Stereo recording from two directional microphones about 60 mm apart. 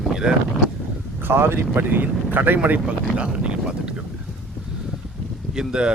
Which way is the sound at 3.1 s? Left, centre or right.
Centre.